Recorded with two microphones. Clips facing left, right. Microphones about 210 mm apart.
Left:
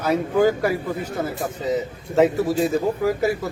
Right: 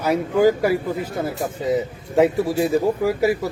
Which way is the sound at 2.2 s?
10° right (ahead or behind).